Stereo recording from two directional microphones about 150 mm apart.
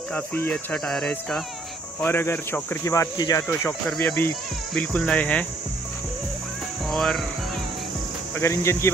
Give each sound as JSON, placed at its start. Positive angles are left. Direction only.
{"t": 0.1, "sound": "speech", "side_deg": 15}
{"t": 2.0, "sound": "speech", "side_deg": 15}
{"t": 6.9, "sound": "cricket", "side_deg": 0}
{"t": 8.4, "sound": "speech", "side_deg": 15}